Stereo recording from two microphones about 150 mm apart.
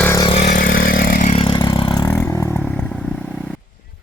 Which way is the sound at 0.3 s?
60° left (ahead or behind).